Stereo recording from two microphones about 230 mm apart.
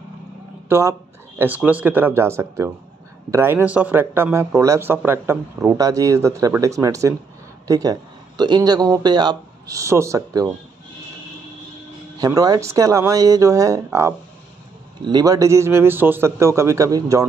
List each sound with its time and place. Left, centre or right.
0.7 s speech: centre
12.2 s speech: centre